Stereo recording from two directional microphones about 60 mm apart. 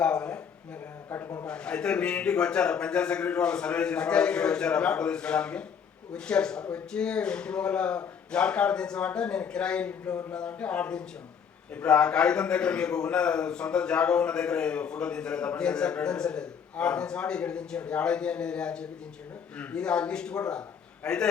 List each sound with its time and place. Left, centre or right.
0.0 s a man's voice: centre
1.5 s a man's voice: centre